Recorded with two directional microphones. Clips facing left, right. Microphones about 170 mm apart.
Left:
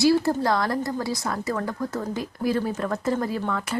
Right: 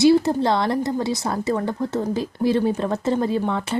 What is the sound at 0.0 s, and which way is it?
Speech, 20° right (ahead or behind).